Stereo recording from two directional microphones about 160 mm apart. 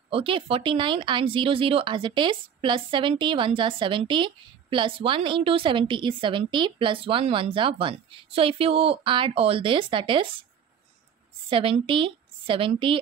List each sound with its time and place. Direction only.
0.1 s speech: 35° right (ahead or behind)
11.4 s a woman's voice: 35° right (ahead or behind)